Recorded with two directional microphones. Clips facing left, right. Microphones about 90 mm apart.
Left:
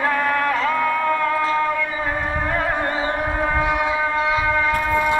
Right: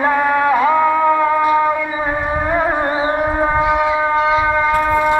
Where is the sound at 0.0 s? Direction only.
20° right (ahead or behind).